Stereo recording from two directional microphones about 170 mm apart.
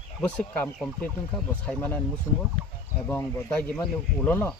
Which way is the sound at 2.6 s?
30° left (ahead or behind).